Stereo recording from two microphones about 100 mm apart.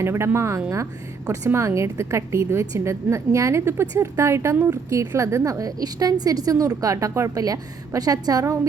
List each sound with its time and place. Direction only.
0.0 s a woman's voice: 25° right (ahead or behind)